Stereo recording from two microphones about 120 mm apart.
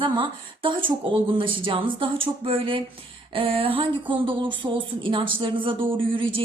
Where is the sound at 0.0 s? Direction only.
45° right (ahead or behind).